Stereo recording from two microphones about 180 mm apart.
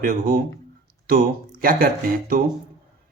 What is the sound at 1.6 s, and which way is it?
Speech, 55° right (ahead or behind).